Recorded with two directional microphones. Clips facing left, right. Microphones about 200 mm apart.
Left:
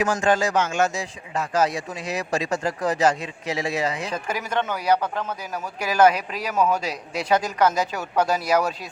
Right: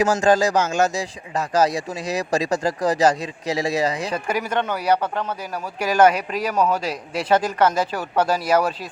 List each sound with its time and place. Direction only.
0.0 s speech: 40° right (ahead or behind)
4.1 s a man's voice: 10° right (ahead or behind)
6.5 s a man's voice: 5° left (ahead or behind)